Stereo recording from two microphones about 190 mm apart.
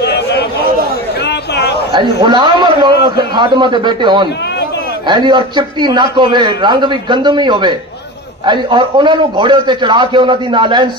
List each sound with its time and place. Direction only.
0.0 s chatter: 60° left (ahead or behind)
1.2 s a sound: 60° left (ahead or behind)
1.9 s a man's voice: 25° right (ahead or behind)